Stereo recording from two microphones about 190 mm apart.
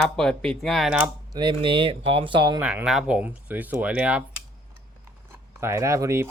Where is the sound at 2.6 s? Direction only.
5° right (ahead or behind).